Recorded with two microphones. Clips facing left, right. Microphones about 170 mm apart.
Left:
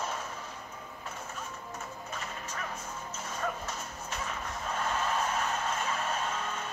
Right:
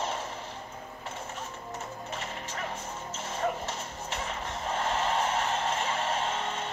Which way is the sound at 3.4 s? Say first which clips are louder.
Right 5 dB; 30° right (ahead or behind).